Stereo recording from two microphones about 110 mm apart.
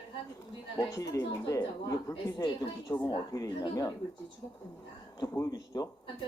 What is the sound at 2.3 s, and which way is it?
Speech, 40° left (ahead or behind).